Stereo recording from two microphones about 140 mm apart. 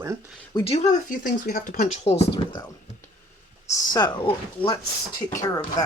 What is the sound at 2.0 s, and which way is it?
Speech, 50° left (ahead or behind).